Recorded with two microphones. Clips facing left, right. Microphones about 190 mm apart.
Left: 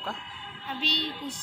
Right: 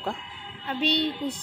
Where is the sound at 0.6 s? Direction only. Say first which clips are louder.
Right 8 dB; 60° right (ahead or behind).